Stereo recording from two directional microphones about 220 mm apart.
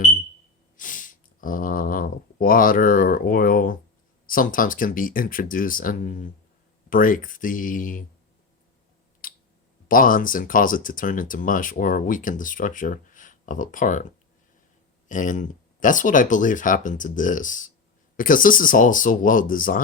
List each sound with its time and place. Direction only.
0.8 s a sound: 35° left (ahead or behind)
4.3 s speech: 40° left (ahead or behind)
9.9 s speech: 40° left (ahead or behind)
15.1 s speech: 35° left (ahead or behind)